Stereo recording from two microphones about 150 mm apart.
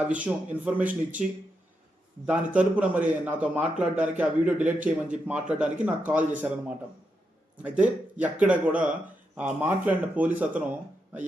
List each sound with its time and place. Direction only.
0.1 s a man's voice: 10° right (ahead or behind)
2.2 s a man's voice: 10° right (ahead or behind)
7.5 s a man's voice: 10° right (ahead or behind)